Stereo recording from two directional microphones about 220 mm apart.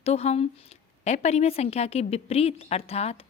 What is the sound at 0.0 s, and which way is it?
Speech, 30° left (ahead or behind).